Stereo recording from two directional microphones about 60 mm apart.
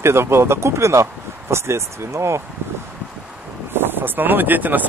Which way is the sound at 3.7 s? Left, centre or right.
Right.